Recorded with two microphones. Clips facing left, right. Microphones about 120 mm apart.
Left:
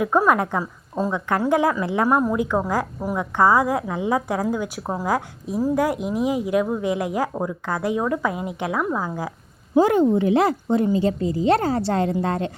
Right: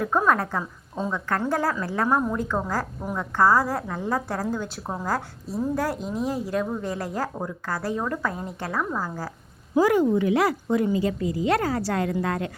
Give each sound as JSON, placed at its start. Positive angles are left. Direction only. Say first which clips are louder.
{"t": 0.0, "sound": "a woman's voice", "louder": "left 4 dB", "side_deg": 10}
{"t": 1.1, "sound": "a woman's voice", "louder": "left 5 dB", "side_deg": 15}